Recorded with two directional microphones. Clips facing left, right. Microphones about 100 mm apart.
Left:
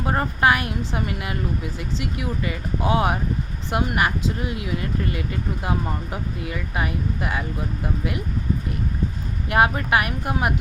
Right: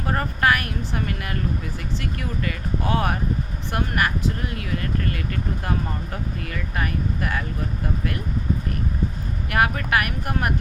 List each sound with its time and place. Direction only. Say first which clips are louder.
0.0 s a woman's voice: left 2 dB; 20° left (ahead or behind)
9.5 s a woman's voice: left 3 dB; 25° left (ahead or behind)